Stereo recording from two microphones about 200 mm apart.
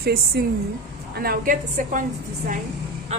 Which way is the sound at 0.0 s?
50° right (ahead or behind).